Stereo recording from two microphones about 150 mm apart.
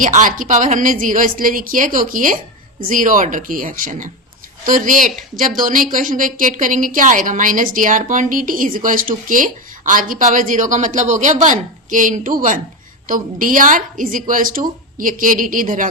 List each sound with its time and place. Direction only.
0.0 s a woman's voice: 60° right (ahead or behind)